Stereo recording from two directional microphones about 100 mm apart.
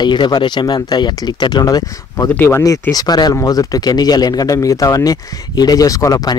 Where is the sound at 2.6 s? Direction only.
35° left (ahead or behind).